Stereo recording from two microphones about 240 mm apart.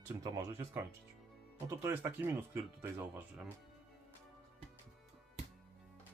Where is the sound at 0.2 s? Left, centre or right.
Centre.